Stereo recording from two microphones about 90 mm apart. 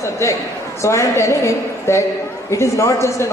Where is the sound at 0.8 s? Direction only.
35° left (ahead or behind).